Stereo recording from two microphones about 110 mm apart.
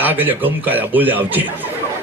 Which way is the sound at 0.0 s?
15° right (ahead or behind).